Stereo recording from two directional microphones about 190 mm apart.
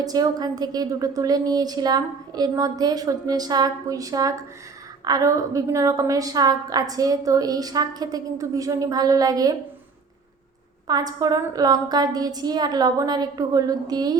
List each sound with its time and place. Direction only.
0.0 s a woman's voice: 20° right (ahead or behind)
10.8 s a woman's voice: 20° right (ahead or behind)